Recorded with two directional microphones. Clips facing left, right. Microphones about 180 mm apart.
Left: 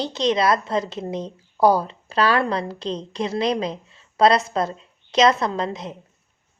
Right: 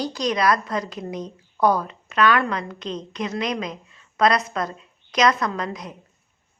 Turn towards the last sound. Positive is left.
turn(degrees=25)  # may be behind; listen again after turning